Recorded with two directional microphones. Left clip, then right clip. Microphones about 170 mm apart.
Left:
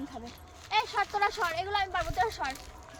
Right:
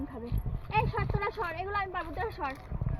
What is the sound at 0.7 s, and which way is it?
Speech, 25° left (ahead or behind).